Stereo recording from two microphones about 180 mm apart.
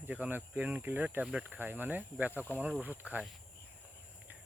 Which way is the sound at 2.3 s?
10° left (ahead or behind).